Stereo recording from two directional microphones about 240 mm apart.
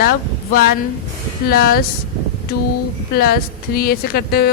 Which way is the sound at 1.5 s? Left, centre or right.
Left.